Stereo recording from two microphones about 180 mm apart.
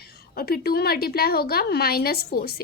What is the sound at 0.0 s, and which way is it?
A woman's voice, 60° left (ahead or behind).